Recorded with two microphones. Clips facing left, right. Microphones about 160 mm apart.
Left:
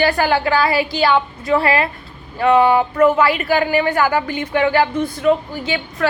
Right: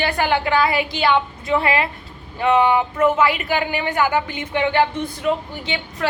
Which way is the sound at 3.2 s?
20° right (ahead or behind).